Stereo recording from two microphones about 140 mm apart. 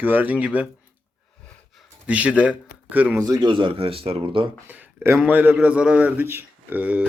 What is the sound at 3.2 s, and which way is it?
Speech, 30° right (ahead or behind).